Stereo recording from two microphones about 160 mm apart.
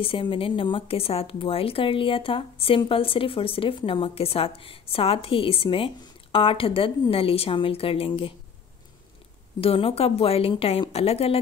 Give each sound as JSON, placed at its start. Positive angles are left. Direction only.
{"t": 0.0, "sound": "speech", "side_deg": 35}
{"t": 9.6, "sound": "speech", "side_deg": 35}